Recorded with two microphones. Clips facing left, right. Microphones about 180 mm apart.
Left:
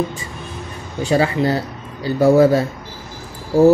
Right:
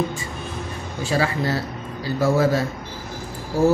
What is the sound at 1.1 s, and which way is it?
Speech, 25° left (ahead or behind).